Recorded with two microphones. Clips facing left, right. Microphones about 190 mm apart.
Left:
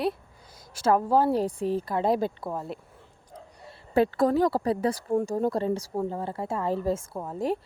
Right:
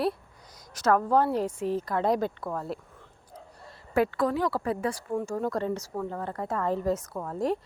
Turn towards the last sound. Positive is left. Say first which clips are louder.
# even
turn(degrees=5)  # may be behind; listen again after turning